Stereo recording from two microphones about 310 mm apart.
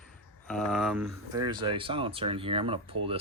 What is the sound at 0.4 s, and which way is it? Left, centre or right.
Speech, centre.